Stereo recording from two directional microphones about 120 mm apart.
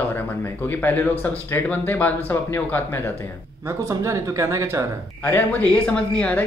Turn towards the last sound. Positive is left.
turn(degrees=10)  # may be behind; listen again after turning